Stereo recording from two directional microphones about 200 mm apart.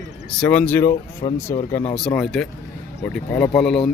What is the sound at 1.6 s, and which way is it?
Speech, 15° left (ahead or behind).